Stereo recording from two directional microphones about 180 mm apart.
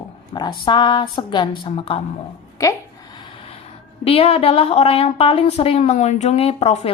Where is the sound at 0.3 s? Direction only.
25° left (ahead or behind).